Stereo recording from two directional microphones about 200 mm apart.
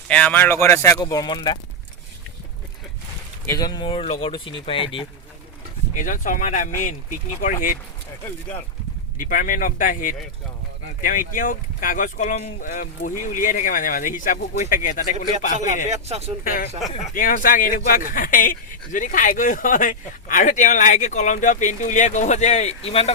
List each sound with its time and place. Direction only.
0.1 s speech: 5° left (ahead or behind)
3.4 s speech: 15° left (ahead or behind)
5.9 s speech: 40° left (ahead or behind)
9.1 s speech: 45° left (ahead or behind)
15.9 s speech: 30° right (ahead or behind)
16.4 s speech: 45° left (ahead or behind); by 23.1 s 30° left (ahead or behind)